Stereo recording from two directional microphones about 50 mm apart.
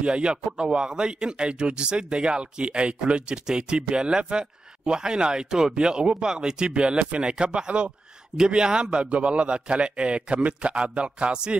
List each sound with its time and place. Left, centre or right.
0.0 s a man's voice: centre